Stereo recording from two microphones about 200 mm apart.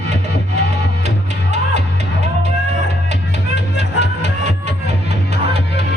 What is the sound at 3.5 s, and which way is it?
Music, 60° left (ahead or behind).